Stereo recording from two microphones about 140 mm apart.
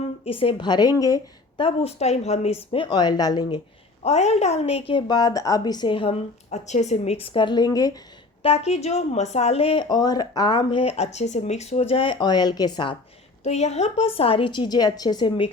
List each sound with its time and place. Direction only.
0.3 s speech: 40° left (ahead or behind); by 1.6 s 25° left (ahead or behind)
1.6 s a woman's voice: 50° left (ahead or behind)
2.7 s speech: 35° left (ahead or behind)
4.0 s speech: 50° left (ahead or behind)
6.5 s a woman's voice: 55° left (ahead or behind); by 7.9 s 25° left (ahead or behind)
8.4 s a woman's voice: 45° left (ahead or behind)
9.9 s speech: 30° left (ahead or behind)
13.4 s speech: 50° left (ahead or behind); by 15.4 s 30° left (ahead or behind)